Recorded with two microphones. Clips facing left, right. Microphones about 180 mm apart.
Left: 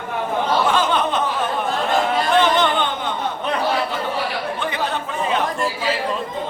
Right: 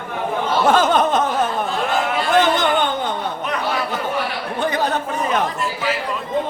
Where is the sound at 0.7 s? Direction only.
45° right (ahead or behind).